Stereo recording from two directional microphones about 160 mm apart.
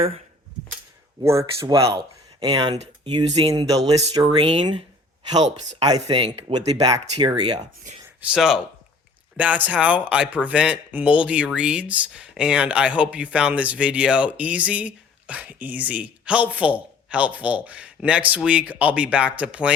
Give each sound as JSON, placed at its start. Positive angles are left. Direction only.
{"t": 1.2, "sound": "speech", "side_deg": -15}
{"t": 2.7, "sound": "a sound", "side_deg": -40}
{"t": 3.1, "sound": "speech", "side_deg": -30}
{"t": 5.8, "sound": "speech", "side_deg": -25}
{"t": 8.3, "sound": "speech", "side_deg": -5}